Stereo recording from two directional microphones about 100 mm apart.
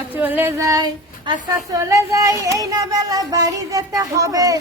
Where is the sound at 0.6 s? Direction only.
35° right (ahead or behind).